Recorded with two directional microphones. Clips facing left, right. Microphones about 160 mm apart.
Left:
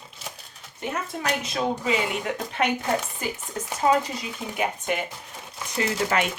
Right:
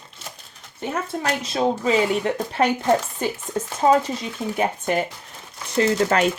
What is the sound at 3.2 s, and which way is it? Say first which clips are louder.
Speech: right 6 dB; 30° right (ahead or behind).